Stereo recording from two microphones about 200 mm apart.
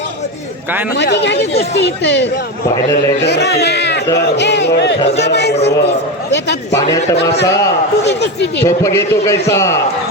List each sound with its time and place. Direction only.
0.9 s speech: 60° left (ahead or behind)
6.7 s a man's voice: 15° left (ahead or behind)
8.0 s speech: 55° left (ahead or behind)
8.6 s a man's voice: 15° left (ahead or behind)